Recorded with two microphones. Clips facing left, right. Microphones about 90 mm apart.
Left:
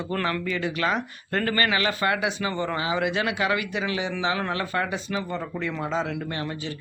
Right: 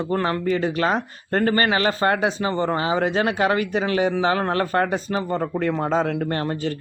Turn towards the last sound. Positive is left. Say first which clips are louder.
# right 7 dB
turn(degrees=-45)  # may be behind; listen again after turning